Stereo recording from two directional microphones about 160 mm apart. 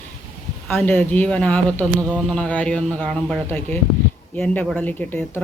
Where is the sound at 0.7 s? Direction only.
10° left (ahead or behind).